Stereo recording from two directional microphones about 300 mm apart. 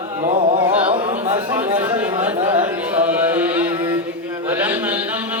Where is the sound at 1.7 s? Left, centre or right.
Centre.